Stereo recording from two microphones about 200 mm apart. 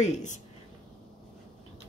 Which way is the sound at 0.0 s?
35° left (ahead or behind).